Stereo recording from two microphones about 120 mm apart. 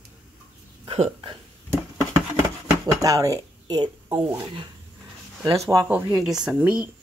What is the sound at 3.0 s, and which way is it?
Speech, 30° right (ahead or behind).